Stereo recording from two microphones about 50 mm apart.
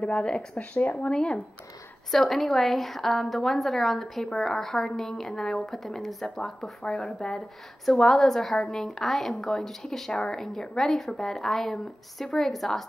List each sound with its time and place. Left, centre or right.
0.2 s speech: left
2.0 s a woman's voice: centre